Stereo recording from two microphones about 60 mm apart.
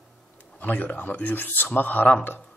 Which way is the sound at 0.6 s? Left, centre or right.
Left.